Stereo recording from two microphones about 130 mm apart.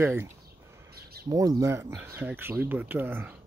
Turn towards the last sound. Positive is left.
turn(degrees=-15)  # may be behind; listen again after turning